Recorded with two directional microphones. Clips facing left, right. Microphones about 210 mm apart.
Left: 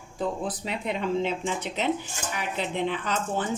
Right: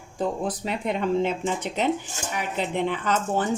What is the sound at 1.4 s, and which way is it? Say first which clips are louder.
Speech: right 3 dB; 45° right (ahead or behind).